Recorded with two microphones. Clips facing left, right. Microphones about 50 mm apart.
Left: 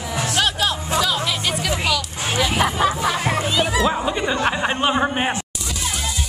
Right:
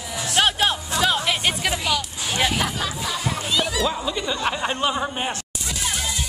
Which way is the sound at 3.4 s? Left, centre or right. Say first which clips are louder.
Left 2 dB; left.